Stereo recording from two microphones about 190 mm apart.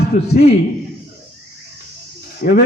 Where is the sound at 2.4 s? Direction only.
45° left (ahead or behind).